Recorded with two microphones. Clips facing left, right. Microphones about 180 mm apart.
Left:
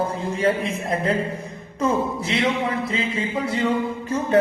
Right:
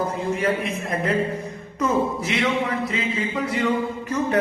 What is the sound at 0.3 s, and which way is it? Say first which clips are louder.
Speech: left 2 dB; 30° left (ahead or behind).